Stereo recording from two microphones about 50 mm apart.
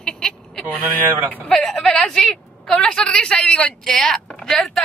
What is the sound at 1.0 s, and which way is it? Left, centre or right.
Speech, right.